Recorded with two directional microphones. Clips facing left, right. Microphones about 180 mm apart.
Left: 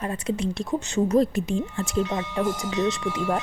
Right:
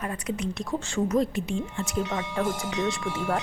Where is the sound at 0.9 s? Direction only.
30° left (ahead or behind).